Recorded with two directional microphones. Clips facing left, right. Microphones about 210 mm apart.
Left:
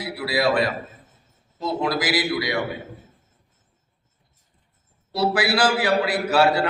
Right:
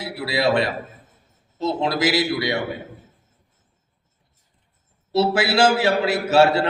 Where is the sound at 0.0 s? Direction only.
25° right (ahead or behind).